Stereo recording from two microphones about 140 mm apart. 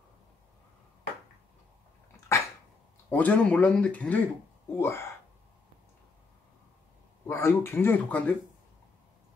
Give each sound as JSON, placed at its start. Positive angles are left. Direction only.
{"t": 2.1, "sound": "dog", "side_deg": 20}
{"t": 3.1, "sound": "speech", "side_deg": 10}
{"t": 7.2, "sound": "speech", "side_deg": 15}